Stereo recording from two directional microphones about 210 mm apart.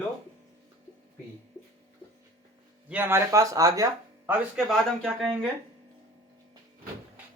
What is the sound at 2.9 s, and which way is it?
A man's voice, 10° right (ahead or behind).